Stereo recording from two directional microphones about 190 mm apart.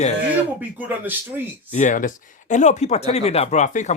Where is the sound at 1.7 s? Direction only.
40° left (ahead or behind).